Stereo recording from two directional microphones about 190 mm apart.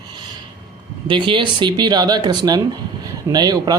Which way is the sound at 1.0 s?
25° right (ahead or behind).